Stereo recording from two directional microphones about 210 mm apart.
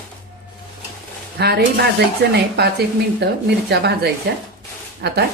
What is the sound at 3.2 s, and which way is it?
Speech, 50° right (ahead or behind).